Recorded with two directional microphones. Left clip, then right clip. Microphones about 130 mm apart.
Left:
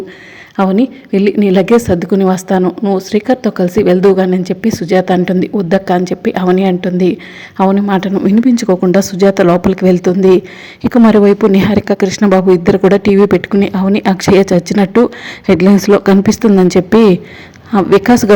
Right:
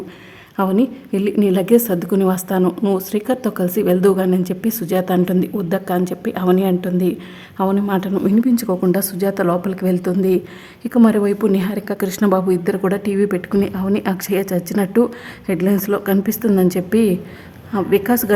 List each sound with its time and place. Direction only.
0.5 s a woman's voice: 25° left (ahead or behind)
11.5 s speech: 40° left (ahead or behind)
11.9 s a woman's voice: 20° left (ahead or behind)